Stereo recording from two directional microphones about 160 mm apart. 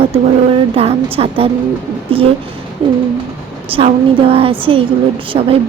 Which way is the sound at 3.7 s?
35° right (ahead or behind).